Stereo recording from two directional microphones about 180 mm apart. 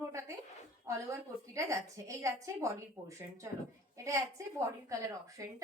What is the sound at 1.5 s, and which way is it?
A woman's voice, 15° right (ahead or behind).